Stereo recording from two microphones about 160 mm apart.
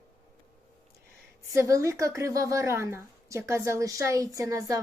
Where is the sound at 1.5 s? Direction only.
20° right (ahead or behind).